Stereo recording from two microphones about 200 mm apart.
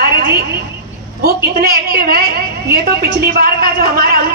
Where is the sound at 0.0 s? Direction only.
50° right (ahead or behind).